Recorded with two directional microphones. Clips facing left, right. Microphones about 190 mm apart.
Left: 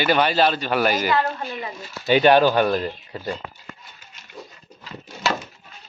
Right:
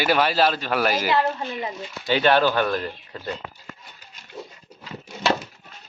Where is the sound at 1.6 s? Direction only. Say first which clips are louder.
Right 2 dB; 20° right (ahead or behind).